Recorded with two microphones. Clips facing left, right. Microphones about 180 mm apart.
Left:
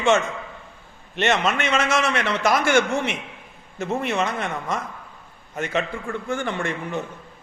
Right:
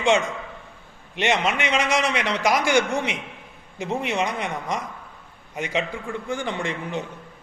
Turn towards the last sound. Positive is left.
turn(degrees=-15)  # may be behind; listen again after turning